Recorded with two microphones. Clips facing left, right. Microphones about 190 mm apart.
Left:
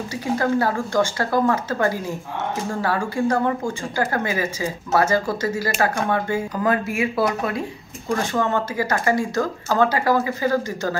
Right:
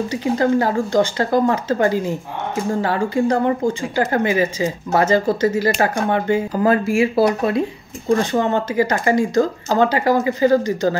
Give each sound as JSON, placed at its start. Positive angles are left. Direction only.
{"t": 0.1, "sound": "speech", "side_deg": -20}